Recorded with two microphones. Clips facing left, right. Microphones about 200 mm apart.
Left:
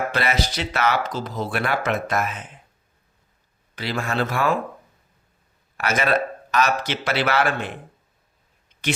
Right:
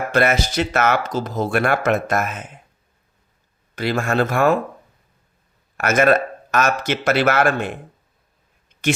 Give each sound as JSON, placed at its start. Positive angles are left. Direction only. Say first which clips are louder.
{"t": 0.1, "sound": "speech", "louder": "right 6 dB", "side_deg": -50}
{"t": 3.8, "sound": "speech", "louder": "right 5 dB", "side_deg": -50}
{"t": 5.7, "sound": "speech", "louder": "right 6 dB", "side_deg": -50}